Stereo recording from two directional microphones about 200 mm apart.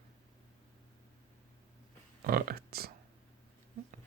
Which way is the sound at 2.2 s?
45° right (ahead or behind).